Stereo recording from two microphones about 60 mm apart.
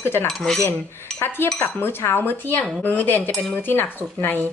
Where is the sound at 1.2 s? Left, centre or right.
Left.